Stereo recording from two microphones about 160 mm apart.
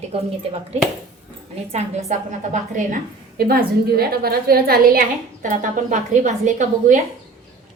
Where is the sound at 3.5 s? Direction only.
70° right (ahead or behind).